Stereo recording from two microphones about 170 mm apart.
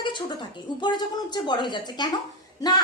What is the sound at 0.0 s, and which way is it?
Speech, 25° left (ahead or behind).